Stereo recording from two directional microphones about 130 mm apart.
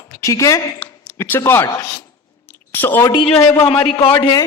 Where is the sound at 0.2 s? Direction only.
25° left (ahead or behind).